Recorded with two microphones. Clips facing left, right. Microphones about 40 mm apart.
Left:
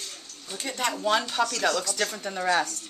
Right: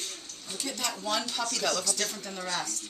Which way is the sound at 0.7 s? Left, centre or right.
Left.